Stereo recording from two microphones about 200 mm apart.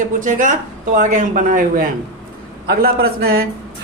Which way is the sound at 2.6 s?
50° right (ahead or behind).